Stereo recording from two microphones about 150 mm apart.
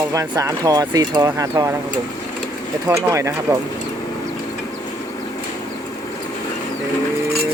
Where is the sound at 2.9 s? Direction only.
20° right (ahead or behind).